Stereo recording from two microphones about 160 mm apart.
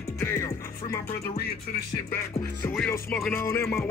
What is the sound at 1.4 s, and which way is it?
Music, 80° left.